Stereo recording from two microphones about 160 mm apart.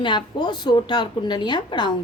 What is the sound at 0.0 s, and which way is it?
A woman's voice, 30° left (ahead or behind).